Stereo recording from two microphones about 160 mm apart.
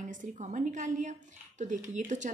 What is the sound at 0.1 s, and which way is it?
Speech, 50° right (ahead or behind).